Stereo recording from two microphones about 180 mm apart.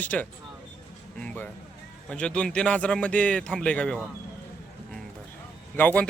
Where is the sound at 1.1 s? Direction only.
10° left (ahead or behind).